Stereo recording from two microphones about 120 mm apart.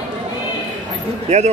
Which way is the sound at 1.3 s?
65° right (ahead or behind).